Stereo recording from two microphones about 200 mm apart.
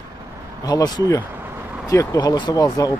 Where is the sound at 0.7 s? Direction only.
20° left (ahead or behind).